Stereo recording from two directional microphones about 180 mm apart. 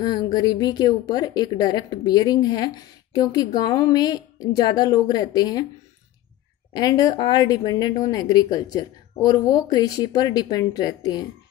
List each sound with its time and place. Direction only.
0.0 s speech: 25° left (ahead or behind)
6.7 s speech: 20° left (ahead or behind)